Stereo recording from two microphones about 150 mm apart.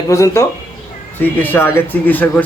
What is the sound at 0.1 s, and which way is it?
Speech, 20° left (ahead or behind).